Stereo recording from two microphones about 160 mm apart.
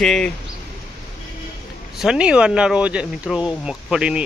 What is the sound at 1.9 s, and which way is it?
Speech, 5° right (ahead or behind).